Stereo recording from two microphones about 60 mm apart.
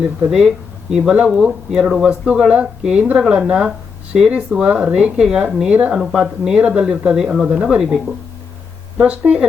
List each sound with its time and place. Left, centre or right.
0.3 s speech: centre
9.0 s speech: right